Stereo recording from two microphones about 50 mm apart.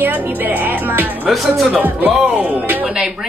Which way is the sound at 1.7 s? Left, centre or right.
Right.